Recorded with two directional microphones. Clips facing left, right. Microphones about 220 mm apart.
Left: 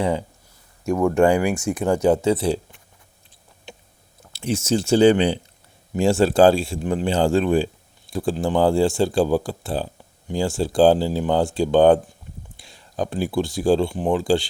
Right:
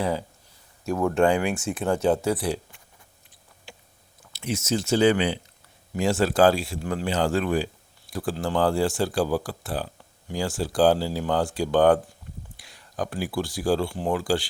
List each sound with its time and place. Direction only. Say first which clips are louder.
1.0 s speech: left 4 dB; 10° left (ahead or behind)
1.5 s speech: left 5 dB; centre (ahead or behind)
2.3 s speech: left 5 dB; 25° left (ahead or behind)
3.7 s a sound: left 5 dB; 20° left (ahead or behind)
4.2 s speech: left 5 dB; 30° left (ahead or behind)